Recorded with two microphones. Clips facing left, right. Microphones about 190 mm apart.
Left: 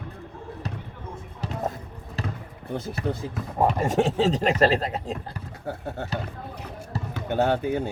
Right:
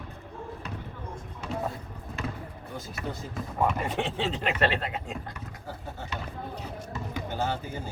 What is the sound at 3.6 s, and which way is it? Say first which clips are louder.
Speech: left 6 dB; 40° left (ahead or behind).